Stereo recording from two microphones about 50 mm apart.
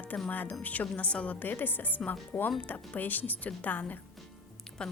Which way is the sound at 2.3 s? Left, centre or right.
Left.